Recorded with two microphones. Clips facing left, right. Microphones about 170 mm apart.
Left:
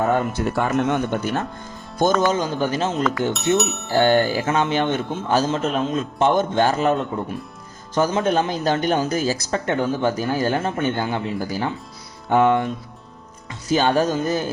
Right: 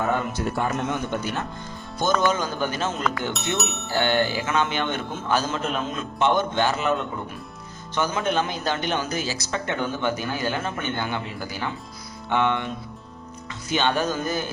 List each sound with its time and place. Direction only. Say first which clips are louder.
0.5 s speech: left 7 dB; 60° left (ahead or behind)
2.3 s speech: left 4 dB; 30° left (ahead or behind)
3.0 s speech: left 5 dB; centre (ahead or behind)
3.9 s speech: left 6 dB; 40° left (ahead or behind)